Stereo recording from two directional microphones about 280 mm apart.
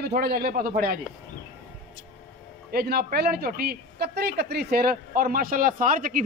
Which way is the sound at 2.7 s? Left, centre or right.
Right.